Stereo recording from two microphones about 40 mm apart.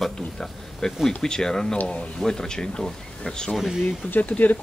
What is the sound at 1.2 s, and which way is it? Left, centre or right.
Speech, centre.